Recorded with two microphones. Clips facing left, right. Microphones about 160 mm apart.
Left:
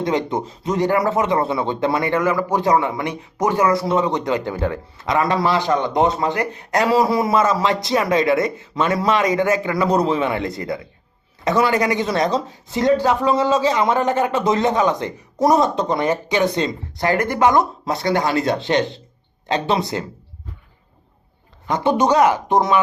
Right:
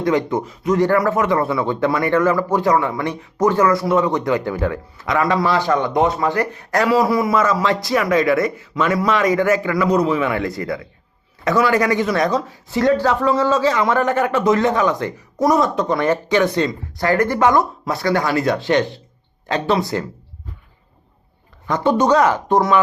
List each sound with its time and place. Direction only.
0.0 s a man's voice: 20° left (ahead or behind)
21.7 s speech: 15° left (ahead or behind)